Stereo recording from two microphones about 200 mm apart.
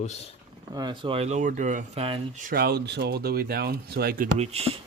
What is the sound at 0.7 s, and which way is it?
Speech, 20° right (ahead or behind).